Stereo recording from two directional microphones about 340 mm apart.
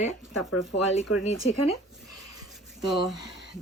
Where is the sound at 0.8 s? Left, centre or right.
Left.